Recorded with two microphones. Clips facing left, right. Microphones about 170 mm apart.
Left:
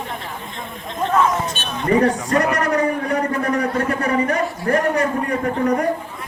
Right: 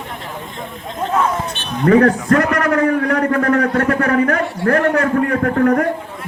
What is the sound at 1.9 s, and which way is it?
A man's voice, 60° right (ahead or behind).